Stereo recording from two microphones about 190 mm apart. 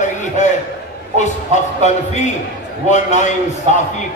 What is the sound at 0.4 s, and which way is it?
A man's voice, 40° left (ahead or behind).